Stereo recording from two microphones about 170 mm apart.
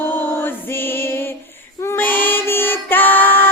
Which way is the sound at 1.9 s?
10° left (ahead or behind).